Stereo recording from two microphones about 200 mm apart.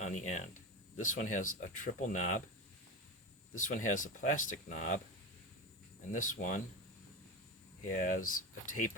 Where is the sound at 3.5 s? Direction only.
40° left (ahead or behind).